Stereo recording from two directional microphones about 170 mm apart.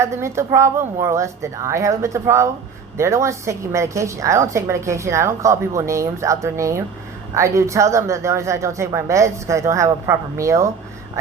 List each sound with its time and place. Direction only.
0.0 s a woman's voice: 15° right (ahead or behind)